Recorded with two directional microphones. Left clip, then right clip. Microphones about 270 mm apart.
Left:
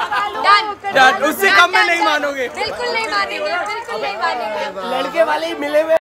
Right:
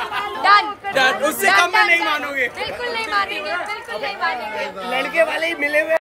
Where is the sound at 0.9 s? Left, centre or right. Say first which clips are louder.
Left 6 dB; left; by 4.3 s centre.